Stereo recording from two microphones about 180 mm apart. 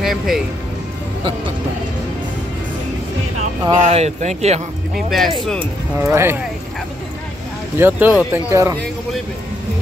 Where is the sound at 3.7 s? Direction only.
40° right (ahead or behind).